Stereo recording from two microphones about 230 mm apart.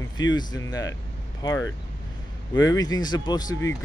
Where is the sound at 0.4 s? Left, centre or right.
Centre.